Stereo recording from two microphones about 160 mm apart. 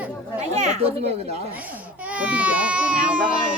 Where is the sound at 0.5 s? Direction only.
45° right (ahead or behind).